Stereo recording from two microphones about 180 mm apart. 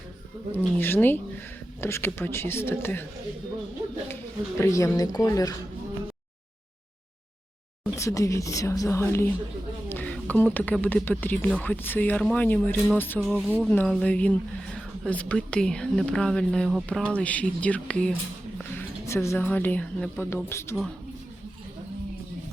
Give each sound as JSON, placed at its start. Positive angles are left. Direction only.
{"t": 0.5, "sound": "speech", "side_deg": 10}
{"t": 4.1, "sound": "speech", "side_deg": 15}
{"t": 7.9, "sound": "speech", "side_deg": 15}